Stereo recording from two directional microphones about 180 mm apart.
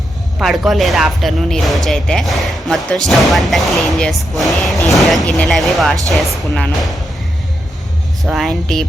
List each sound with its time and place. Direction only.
0.3 s speech: centre (ahead or behind)
8.2 s speech: centre (ahead or behind)